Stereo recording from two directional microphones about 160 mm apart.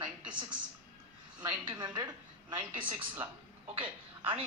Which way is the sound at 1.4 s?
25° right (ahead or behind).